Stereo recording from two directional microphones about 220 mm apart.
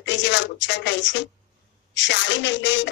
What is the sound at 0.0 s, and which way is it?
Speech, 55° left (ahead or behind).